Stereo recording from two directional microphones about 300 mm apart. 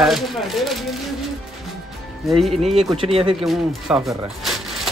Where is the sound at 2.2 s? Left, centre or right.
Centre.